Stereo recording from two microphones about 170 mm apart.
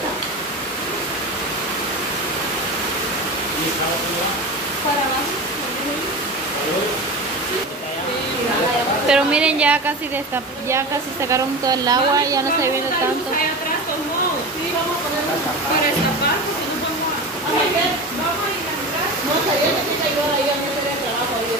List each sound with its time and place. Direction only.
9.0 s a woman's voice: 5° right (ahead or behind)
11.2 s a woman's voice: 20° right (ahead or behind)